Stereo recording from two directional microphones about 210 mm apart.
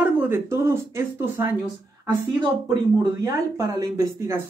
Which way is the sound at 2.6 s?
20° right (ahead or behind).